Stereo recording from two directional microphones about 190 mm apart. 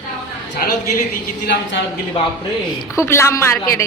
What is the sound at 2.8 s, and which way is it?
A woman's voice, 15° left (ahead or behind).